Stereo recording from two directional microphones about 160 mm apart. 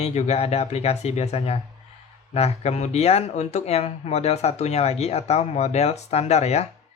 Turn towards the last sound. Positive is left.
turn(degrees=45)  # may be behind; listen again after turning